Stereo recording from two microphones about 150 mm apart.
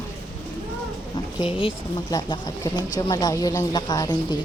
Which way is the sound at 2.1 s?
25° left (ahead or behind).